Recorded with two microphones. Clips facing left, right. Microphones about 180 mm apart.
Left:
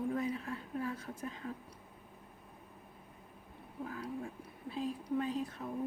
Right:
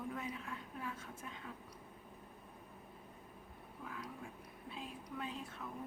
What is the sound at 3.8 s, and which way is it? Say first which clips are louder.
A woman's voice: left 8 dB; 35° left (ahead or behind).